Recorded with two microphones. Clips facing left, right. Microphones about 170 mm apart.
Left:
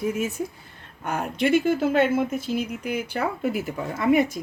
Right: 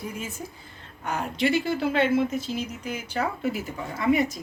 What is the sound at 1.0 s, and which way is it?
Speech, 50° left (ahead or behind).